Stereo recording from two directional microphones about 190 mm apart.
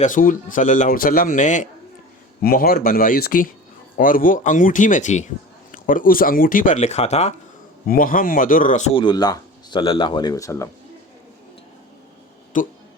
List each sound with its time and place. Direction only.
0.0 s a man's voice: 45° left (ahead or behind)
7.9 s a man's voice: 45° left (ahead or behind)
8.9 s speech: 25° left (ahead or behind)
12.5 s a man's voice: 45° left (ahead or behind)